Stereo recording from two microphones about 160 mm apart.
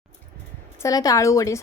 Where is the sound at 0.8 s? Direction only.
20° left (ahead or behind).